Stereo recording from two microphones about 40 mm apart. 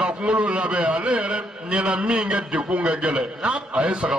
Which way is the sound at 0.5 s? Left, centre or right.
Right.